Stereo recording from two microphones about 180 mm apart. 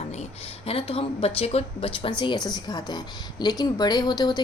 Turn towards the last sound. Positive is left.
turn(degrees=25)  # may be behind; listen again after turning